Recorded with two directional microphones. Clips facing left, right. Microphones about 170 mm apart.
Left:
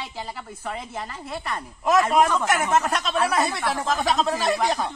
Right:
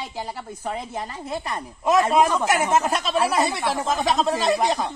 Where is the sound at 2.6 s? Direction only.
30° right (ahead or behind).